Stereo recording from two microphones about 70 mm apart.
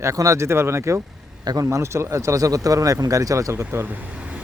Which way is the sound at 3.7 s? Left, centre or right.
Right.